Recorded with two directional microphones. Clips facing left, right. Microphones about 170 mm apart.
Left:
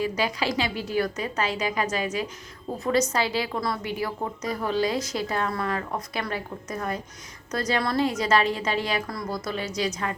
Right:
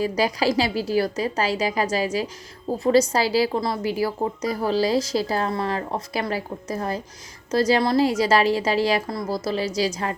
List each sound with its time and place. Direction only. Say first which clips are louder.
0.0 s a woman's voice: right 5 dB; 35° right (ahead or behind)